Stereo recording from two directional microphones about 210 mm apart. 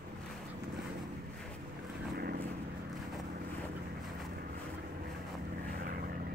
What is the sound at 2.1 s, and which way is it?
Vehicle, 50° right (ahead or behind).